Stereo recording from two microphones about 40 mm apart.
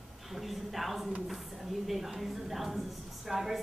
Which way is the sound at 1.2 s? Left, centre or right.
Centre.